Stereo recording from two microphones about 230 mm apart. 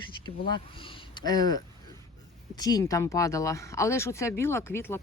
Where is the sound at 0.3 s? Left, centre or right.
Left.